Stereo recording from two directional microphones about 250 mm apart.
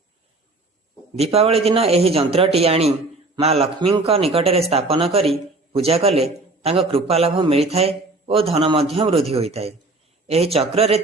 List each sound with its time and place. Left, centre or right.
1.1 s a man's voice: right